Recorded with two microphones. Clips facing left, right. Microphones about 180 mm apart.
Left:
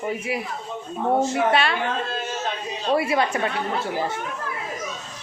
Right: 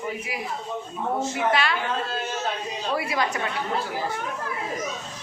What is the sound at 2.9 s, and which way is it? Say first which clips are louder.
Speech: left 5 dB; 30° left (ahead or behind).